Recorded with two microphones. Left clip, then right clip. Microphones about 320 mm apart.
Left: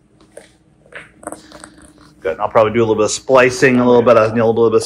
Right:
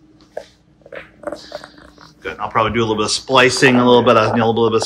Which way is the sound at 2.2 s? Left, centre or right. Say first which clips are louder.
Left 5 dB; centre.